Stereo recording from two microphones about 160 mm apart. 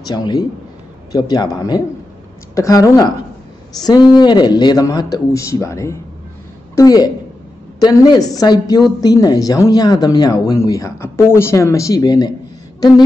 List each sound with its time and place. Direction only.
0.1 s a woman's voice: 25° left (ahead or behind)